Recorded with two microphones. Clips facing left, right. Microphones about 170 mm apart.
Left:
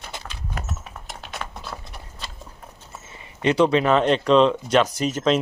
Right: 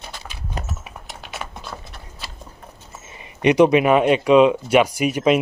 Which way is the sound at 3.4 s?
15° right (ahead or behind).